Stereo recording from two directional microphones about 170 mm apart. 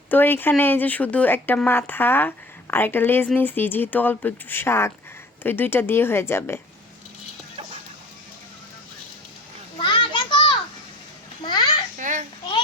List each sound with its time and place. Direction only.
0.1 s speech: 10° left (ahead or behind)
9.7 s children playing: 30° left (ahead or behind)
11.9 s babbling: 50° right (ahead or behind)